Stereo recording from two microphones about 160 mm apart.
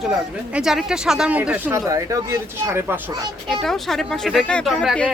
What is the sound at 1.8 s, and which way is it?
Speech, 20° right (ahead or behind).